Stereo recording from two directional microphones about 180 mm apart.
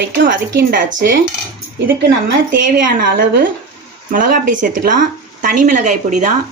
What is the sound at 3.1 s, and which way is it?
A woman's voice, 55° right (ahead or behind).